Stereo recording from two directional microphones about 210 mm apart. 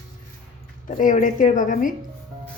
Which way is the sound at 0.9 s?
40° left (ahead or behind).